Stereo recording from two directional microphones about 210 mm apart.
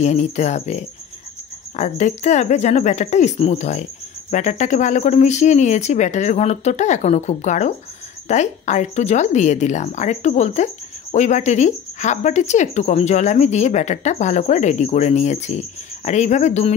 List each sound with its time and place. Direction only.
0.0 s speech: 35° left (ahead or behind)